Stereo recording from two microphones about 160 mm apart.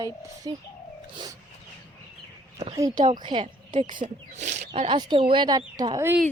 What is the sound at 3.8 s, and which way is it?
Speech, 55° right (ahead or behind).